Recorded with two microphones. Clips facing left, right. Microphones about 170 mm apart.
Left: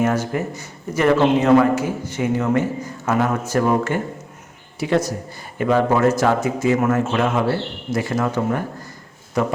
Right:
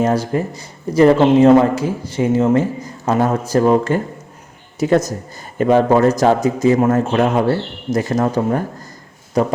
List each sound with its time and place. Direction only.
0.0 s speech: 35° right (ahead or behind)
4.8 s speech: 45° right (ahead or behind)